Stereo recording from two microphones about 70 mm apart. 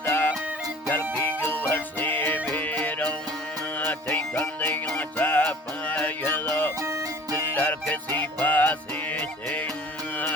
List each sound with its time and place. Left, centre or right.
0.0 s music: left
7.5 s music: left